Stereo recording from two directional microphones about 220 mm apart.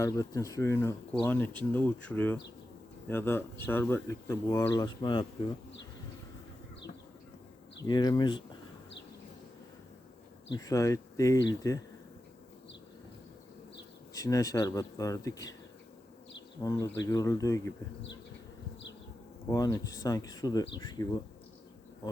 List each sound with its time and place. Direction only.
0.0 s speech: 15° left (ahead or behind)
7.9 s speech: 20° left (ahead or behind)
10.5 s speech: 15° left (ahead or behind)
14.1 s speech: 15° left (ahead or behind)
16.6 s speech: 15° left (ahead or behind)
19.5 s speech: 15° left (ahead or behind)